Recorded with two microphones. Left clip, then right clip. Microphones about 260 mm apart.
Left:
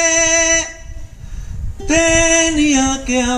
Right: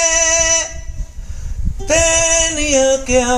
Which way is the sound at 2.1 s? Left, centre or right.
Right.